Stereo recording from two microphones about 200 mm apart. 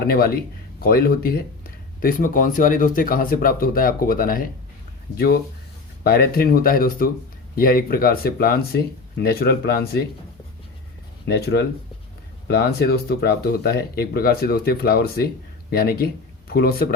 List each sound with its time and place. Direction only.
0.0 s speech: 50° left (ahead or behind)
11.3 s speech: 55° left (ahead or behind)